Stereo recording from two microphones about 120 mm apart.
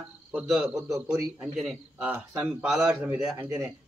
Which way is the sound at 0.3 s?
5° right (ahead or behind).